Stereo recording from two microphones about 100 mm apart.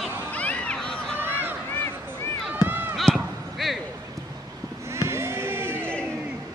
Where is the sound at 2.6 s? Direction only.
40° left (ahead or behind).